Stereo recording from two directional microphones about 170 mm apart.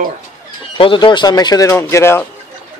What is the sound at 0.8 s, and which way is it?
Speech, 30° left (ahead or behind).